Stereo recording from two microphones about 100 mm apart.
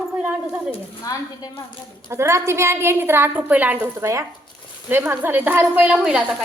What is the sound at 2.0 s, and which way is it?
A woman's voice, 30° right (ahead or behind).